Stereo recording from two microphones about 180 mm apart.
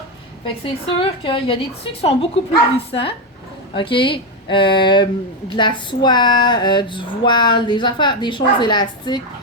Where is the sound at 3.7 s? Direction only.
30° left (ahead or behind).